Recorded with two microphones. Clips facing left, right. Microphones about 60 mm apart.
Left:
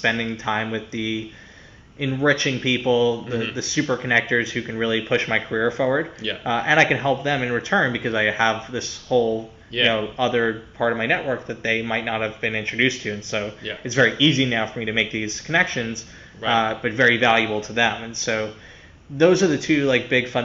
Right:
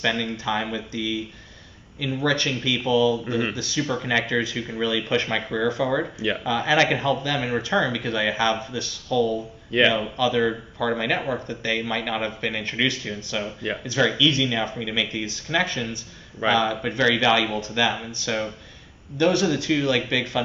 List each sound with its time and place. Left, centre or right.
0.0 s speech: left